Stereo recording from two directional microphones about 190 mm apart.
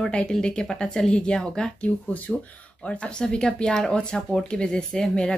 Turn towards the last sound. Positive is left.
turn(degrees=5)  # may be behind; listen again after turning